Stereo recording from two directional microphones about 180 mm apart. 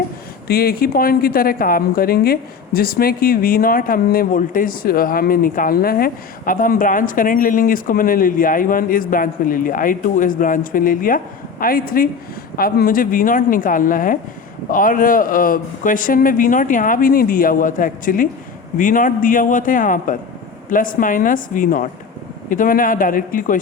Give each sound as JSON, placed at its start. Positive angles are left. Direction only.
{"t": 0.4, "sound": "a woman's voice", "side_deg": 60}